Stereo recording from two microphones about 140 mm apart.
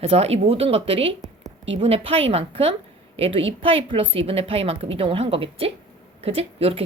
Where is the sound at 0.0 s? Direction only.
45° right (ahead or behind).